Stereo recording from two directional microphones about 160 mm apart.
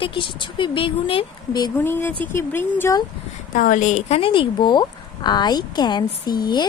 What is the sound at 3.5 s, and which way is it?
Speech, 55° left (ahead or behind).